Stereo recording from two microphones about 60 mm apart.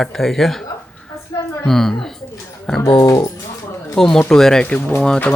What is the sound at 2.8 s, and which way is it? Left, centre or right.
Speech, left.